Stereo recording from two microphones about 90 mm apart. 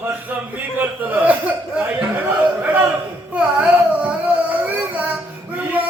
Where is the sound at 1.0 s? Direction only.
20° right (ahead or behind).